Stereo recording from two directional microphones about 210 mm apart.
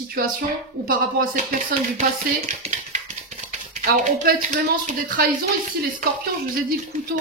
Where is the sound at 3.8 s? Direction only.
45° right (ahead or behind).